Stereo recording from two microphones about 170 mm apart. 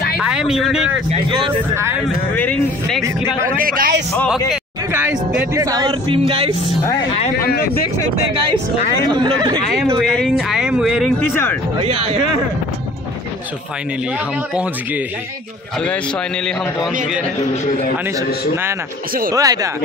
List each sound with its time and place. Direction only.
0.2 s speech: 5° right (ahead or behind)
2.3 s speech: 10° left (ahead or behind)
3.5 s a man's voice: 55° right (ahead or behind)
4.9 s speech: 10° right (ahead or behind)
5.5 s speech: 20° right (ahead or behind)
7.4 s speech: 65° left (ahead or behind)
9.1 s speech: 25° right (ahead or behind)
9.9 s speech: centre (ahead or behind)
11.8 s speech: 35° right (ahead or behind)
17.6 s a man's voice: 50° left (ahead or behind)
19.3 s speech: 20° right (ahead or behind)